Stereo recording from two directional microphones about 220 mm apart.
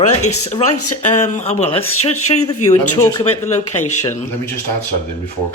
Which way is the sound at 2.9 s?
15° left (ahead or behind).